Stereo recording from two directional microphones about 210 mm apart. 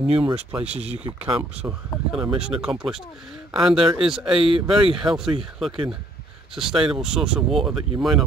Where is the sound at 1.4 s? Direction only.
5° right (ahead or behind).